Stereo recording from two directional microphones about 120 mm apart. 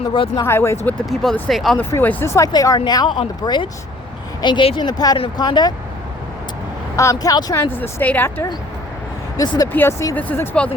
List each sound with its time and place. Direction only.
0.1 s speech: 45° left (ahead or behind)
0.4 s speech: 20° left (ahead or behind)
0.9 s speech: 5° left (ahead or behind)
1.8 s speech: 15° left (ahead or behind)
2.5 s speech: 35° left (ahead or behind)
6.9 s speech: 25° left (ahead or behind)
9.4 s speech: 30° left (ahead or behind)
9.7 s speech: 15° left (ahead or behind)